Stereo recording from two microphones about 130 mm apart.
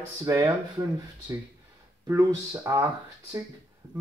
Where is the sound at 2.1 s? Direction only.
25° right (ahead or behind).